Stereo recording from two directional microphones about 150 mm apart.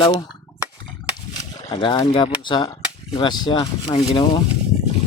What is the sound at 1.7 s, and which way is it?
Speech, 30° left (ahead or behind).